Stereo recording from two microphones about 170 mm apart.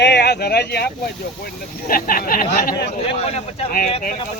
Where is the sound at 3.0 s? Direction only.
35° left (ahead or behind).